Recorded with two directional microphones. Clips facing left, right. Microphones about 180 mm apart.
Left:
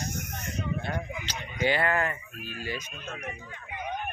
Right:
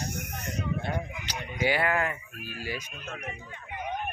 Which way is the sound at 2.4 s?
10° right (ahead or behind).